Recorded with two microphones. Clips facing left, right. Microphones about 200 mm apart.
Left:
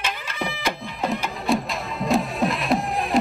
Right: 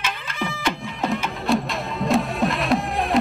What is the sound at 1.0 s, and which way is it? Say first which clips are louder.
Music: right 1 dB; centre (ahead or behind).